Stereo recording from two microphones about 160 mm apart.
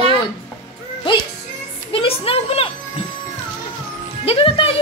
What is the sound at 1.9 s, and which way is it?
Speech, 35° left (ahead or behind).